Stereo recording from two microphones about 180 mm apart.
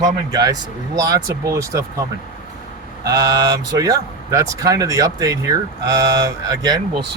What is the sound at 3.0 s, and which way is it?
Speech, 20° right (ahead or behind).